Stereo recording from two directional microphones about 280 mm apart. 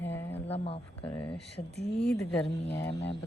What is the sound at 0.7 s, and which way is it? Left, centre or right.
Speech, centre.